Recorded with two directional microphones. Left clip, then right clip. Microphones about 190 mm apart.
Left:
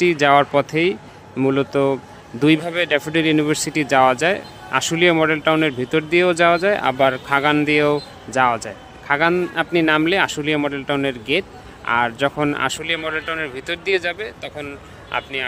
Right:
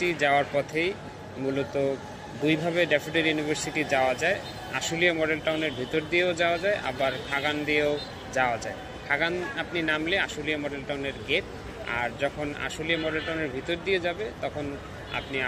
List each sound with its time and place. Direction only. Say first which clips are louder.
0.0 s speech: left 9 dB; 40° left (ahead or behind)